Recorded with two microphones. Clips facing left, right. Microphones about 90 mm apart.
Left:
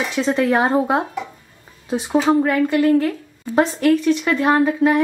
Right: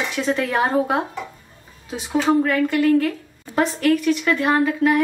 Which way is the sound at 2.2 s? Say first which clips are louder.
Even; 15° left (ahead or behind).